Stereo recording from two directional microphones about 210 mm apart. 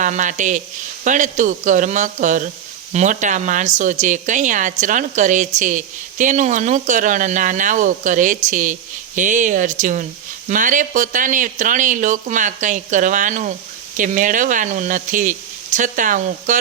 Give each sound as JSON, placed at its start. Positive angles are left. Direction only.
{"t": 0.0, "sound": "speech", "side_deg": -35}